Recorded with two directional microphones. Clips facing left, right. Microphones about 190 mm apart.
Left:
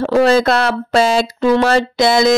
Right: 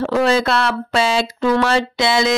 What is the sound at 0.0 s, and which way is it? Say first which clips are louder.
Speech: left 4 dB; 40° left (ahead or behind).